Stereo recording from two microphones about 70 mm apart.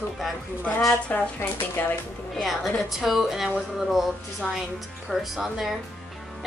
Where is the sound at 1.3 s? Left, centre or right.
Left.